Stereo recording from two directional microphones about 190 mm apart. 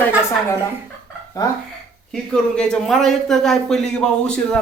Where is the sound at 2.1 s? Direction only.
5° left (ahead or behind).